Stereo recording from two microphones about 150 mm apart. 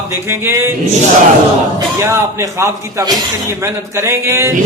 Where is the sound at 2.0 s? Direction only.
15° right (ahead or behind).